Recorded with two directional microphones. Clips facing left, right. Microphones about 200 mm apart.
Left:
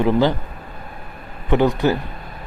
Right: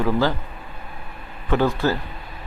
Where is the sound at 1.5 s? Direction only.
20° left (ahead or behind).